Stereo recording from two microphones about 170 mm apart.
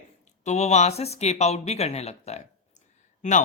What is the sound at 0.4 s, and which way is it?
Speech, 40° left (ahead or behind).